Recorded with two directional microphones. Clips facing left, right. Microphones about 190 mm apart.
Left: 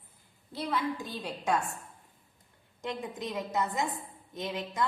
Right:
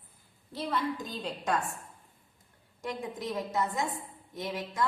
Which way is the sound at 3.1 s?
20° left (ahead or behind).